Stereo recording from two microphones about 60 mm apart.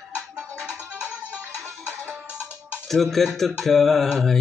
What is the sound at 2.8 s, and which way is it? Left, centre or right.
Speech, centre.